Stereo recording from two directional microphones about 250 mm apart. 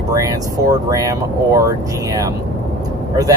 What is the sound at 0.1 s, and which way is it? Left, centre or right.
Speech, centre.